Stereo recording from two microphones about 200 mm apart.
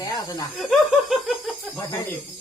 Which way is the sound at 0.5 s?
Centre (ahead or behind).